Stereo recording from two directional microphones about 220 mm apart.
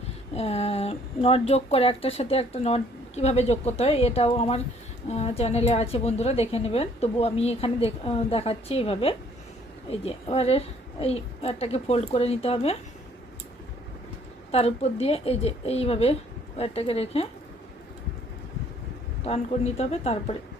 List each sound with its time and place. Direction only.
0.3 s speech: 30° left (ahead or behind)
14.5 s speech: 30° left (ahead or behind)
19.2 s speech: 30° left (ahead or behind)